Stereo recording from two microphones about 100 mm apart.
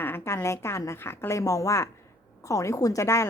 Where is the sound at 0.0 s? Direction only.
20° left (ahead or behind).